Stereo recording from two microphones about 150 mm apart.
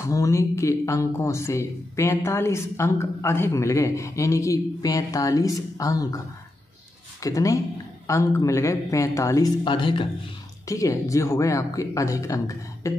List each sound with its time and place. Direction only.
0.1 s speech: 20° left (ahead or behind)
9.7 s speech: 35° left (ahead or behind)
10.7 s speech: 20° left (ahead or behind)